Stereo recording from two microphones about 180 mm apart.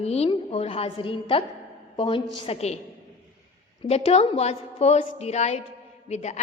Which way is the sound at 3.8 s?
35° left (ahead or behind).